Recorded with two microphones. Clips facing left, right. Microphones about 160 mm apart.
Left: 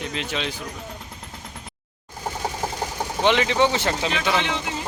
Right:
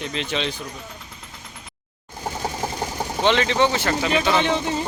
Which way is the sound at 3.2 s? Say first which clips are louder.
Even; 15° left (ahead or behind).